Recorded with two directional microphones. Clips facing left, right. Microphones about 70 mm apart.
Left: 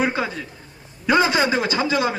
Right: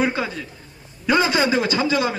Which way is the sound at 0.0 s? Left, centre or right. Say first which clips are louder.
Even; left.